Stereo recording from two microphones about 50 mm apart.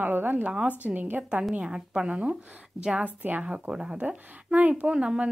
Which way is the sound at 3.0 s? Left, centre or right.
Right.